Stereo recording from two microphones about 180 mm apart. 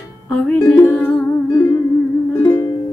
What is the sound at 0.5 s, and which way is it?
Music, 5° left (ahead or behind).